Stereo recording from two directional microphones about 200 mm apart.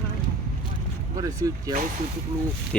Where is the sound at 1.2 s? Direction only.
20° right (ahead or behind).